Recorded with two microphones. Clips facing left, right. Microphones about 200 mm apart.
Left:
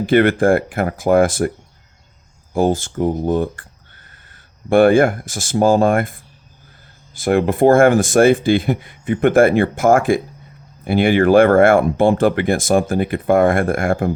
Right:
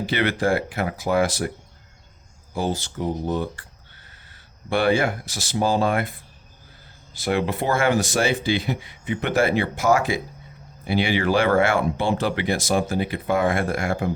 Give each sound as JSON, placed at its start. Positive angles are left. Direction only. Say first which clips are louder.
{"t": 0.0, "sound": "speech", "louder": "left 9 dB", "side_deg": 50}
{"t": 2.5, "sound": "speech", "louder": "left 9 dB", "side_deg": 50}